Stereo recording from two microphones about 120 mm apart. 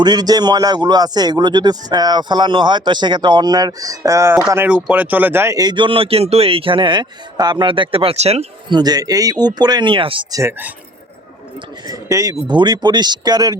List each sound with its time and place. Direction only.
0.0 s a man's voice: 35° right (ahead or behind); by 5.5 s 20° right (ahead or behind)
5.5 s speech: 40° right (ahead or behind); by 8.4 s 60° right (ahead or behind)
8.7 s a man's voice: 35° right (ahead or behind)
11.9 s speech: 25° right (ahead or behind)
12.5 s a man's voice: 35° right (ahead or behind)